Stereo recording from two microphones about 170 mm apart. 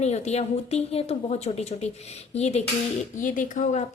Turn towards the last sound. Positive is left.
turn(degrees=45)  # may be behind; listen again after turning